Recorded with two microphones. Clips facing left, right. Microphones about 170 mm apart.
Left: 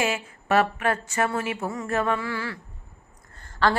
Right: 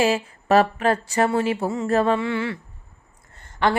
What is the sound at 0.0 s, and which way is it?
A woman's voice, 35° right (ahead or behind).